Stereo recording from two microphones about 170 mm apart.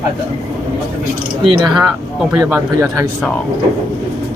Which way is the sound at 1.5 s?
30° right (ahead or behind).